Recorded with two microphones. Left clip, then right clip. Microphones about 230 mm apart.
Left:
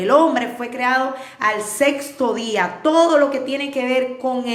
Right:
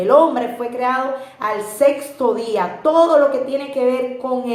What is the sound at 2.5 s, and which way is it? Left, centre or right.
A woman's voice, left.